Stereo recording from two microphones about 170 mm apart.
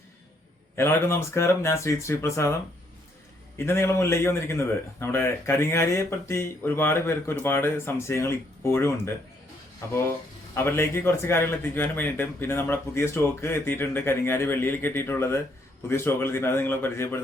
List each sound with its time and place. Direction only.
0.8 s a man's voice: 15° left (ahead or behind)
3.6 s a man's voice: 15° left (ahead or behind)